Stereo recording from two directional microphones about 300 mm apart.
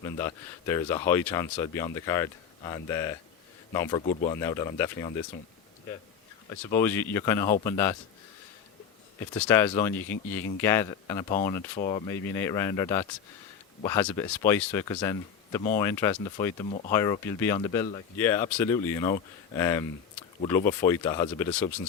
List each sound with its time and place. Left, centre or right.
0.0 s speech: centre
4.0 s speech: left
4.4 s speech: centre
6.7 s speech: centre
9.3 s speech: centre